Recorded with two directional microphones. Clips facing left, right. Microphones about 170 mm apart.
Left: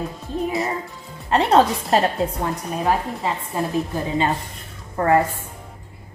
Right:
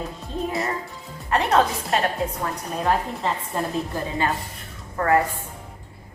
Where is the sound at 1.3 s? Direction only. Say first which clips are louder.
Left 4 dB; 30° left (ahead or behind).